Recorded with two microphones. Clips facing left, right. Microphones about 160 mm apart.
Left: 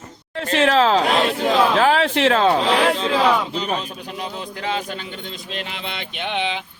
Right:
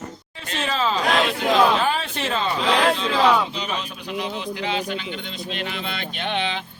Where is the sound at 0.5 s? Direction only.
90° left.